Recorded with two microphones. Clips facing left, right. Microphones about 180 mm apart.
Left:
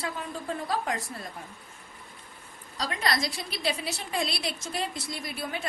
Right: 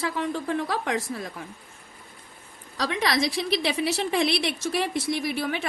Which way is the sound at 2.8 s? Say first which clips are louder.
Right 5 dB; 90° right.